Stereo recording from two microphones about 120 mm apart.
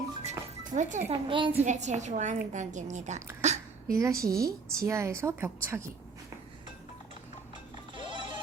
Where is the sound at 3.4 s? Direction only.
70° right (ahead or behind).